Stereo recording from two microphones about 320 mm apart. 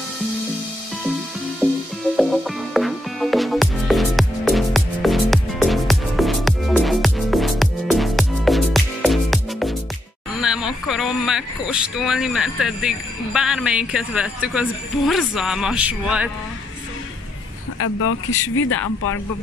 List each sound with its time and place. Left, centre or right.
2.1 s music: centre
10.4 s speech: centre
17.7 s speech: left